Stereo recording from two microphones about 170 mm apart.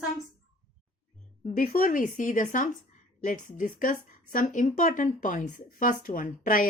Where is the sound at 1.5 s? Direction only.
55° left (ahead or behind).